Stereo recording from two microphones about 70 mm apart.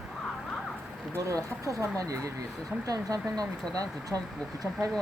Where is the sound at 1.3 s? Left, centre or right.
Right.